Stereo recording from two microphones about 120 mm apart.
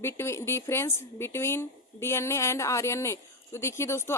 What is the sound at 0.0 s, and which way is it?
A woman's voice, 20° left (ahead or behind).